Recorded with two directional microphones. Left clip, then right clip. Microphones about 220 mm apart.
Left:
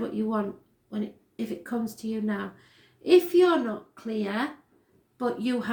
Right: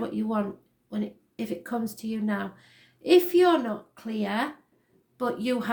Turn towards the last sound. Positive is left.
turn(degrees=-45)  # may be behind; listen again after turning